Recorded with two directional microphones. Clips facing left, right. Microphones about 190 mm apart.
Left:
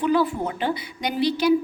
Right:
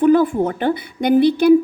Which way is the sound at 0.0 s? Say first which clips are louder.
Right 8 dB; 50° right (ahead or behind).